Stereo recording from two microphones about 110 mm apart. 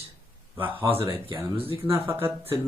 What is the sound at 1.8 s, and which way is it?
Speech, 25° right (ahead or behind).